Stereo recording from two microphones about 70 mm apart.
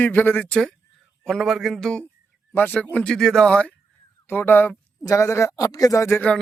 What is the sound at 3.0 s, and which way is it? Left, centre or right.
Speech, centre.